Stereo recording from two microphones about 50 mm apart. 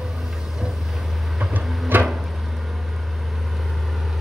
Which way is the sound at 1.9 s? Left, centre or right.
Right.